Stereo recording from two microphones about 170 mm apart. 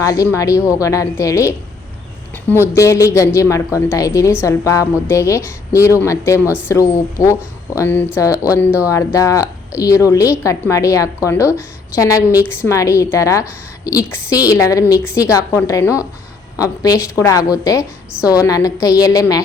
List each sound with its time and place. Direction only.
0.0 s a woman's voice: 20° left (ahead or behind)